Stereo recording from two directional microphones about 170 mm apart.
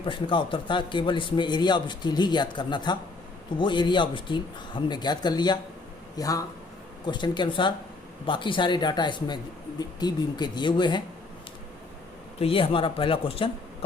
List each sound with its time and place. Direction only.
0.0 s a man's voice: 30° left (ahead or behind)
12.4 s speech: 30° left (ahead or behind)